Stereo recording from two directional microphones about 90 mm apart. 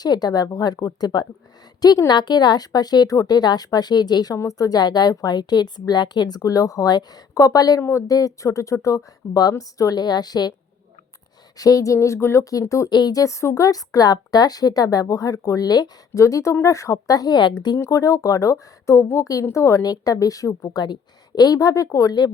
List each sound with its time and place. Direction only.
0.0 s a woman's voice: 50° left (ahead or behind)
7.8 s speech: 30° left (ahead or behind)
8.0 s speech: 40° left (ahead or behind)
11.5 s speech: 40° left (ahead or behind)
12.9 s speech: 50° left (ahead or behind)
16.2 s speech: 35° left (ahead or behind); by 17.5 s 50° left (ahead or behind)
17.7 s speech: 35° left (ahead or behind)
20.7 s a woman's voice: 55° left (ahead or behind)